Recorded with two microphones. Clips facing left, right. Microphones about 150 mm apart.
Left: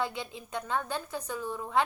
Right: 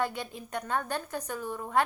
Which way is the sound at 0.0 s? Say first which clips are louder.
Right 2 dB; 50° right (ahead or behind).